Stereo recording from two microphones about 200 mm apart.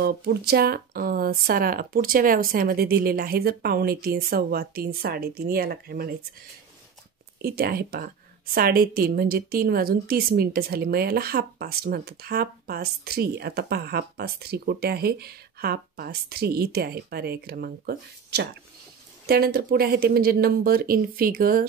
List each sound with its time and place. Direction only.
0.0 s a woman's voice: 50° right (ahead or behind)
7.4 s a woman's voice: 50° right (ahead or behind)